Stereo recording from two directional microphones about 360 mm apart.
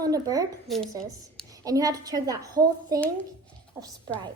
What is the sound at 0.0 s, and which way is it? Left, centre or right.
Child singing, centre.